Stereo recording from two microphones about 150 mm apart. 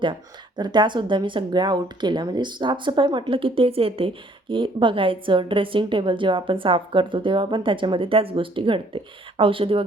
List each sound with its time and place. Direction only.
0.0 s speech: 30° right (ahead or behind)